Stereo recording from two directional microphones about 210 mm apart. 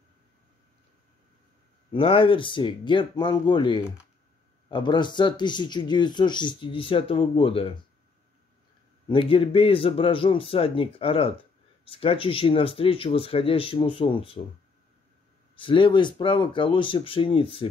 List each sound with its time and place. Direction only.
1.9 s speech: 25° left (ahead or behind)
9.1 s speech: 25° left (ahead or behind)
15.5 s speech: 25° left (ahead or behind)